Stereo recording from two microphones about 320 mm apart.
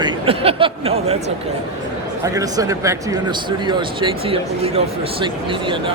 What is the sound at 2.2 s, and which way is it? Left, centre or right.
Speech, centre.